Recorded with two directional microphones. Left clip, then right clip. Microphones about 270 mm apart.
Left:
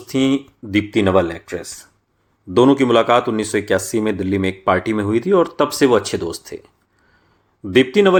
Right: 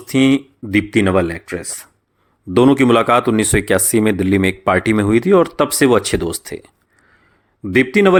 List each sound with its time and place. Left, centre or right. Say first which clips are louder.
0.1 s speech: right 4 dB; right